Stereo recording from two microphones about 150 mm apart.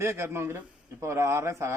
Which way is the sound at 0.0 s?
15° right (ahead or behind).